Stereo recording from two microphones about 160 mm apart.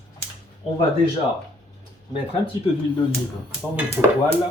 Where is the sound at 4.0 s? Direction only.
5° right (ahead or behind).